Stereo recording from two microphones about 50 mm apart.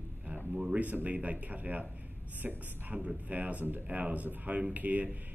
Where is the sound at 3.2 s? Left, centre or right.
Right.